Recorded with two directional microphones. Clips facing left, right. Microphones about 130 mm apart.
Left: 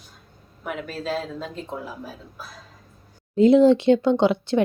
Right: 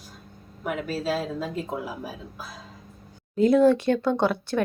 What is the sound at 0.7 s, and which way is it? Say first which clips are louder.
Speech: right 2 dB; 5° right (ahead or behind).